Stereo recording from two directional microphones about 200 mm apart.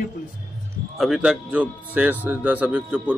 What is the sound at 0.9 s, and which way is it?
Speech, centre (ahead or behind).